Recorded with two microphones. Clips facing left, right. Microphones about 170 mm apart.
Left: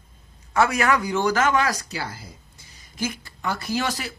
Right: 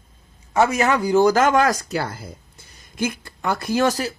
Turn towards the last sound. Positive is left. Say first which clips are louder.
# right 7 dB
turn(degrees=-45)  # may be behind; listen again after turning